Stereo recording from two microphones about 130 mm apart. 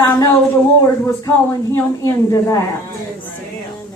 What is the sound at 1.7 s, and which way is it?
Speech, 20° left (ahead or behind).